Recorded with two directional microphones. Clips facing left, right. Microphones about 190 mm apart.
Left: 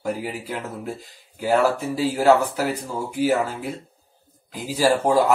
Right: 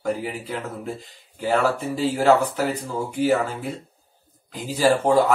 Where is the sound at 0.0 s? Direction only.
5° left (ahead or behind).